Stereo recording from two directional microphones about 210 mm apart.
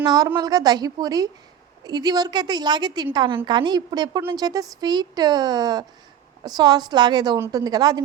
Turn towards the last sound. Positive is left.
turn(degrees=-20)  # may be behind; listen again after turning